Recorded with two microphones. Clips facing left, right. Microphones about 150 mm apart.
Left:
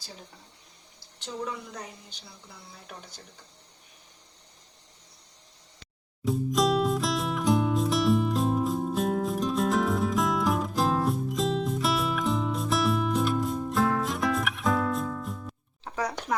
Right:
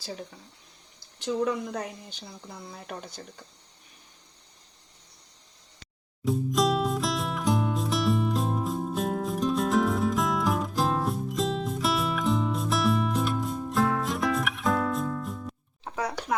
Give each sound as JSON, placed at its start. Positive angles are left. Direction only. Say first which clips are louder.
{"t": 1.5, "sound": "speech", "louder": "right 8 dB", "side_deg": -65}
{"t": 6.2, "sound": "music", "louder": "even", "side_deg": 0}
{"t": 15.8, "sound": "a sound", "louder": "even", "side_deg": -10}